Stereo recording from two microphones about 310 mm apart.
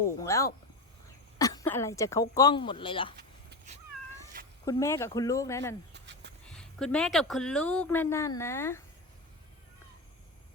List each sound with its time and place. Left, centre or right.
0.3 s speech: centre
4.6 s speech: centre
5.9 s a sound: right
6.5 s speech: centre